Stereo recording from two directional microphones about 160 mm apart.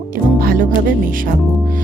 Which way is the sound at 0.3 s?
65° right (ahead or behind).